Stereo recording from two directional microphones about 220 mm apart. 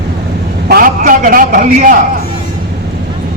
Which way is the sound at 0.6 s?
40° right (ahead or behind).